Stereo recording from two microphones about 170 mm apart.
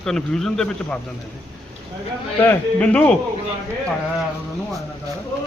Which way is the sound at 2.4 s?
10° left (ahead or behind).